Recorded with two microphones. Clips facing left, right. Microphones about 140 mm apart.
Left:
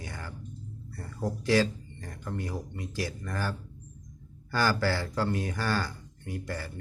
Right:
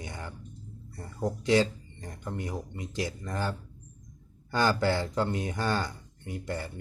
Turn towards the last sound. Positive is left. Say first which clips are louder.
# right 1 dB
turn(degrees=-20)  # may be behind; listen again after turning